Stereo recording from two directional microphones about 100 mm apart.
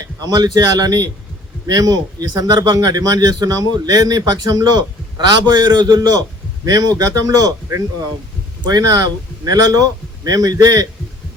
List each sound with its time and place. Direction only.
0.2 s speech: 40° right (ahead or behind)